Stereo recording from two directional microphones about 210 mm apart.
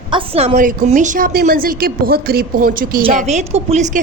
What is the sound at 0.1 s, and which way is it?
A woman's voice, 30° right (ahead or behind).